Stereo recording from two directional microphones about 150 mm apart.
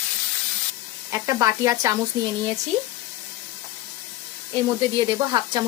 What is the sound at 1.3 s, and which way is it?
Speech, 20° right (ahead or behind).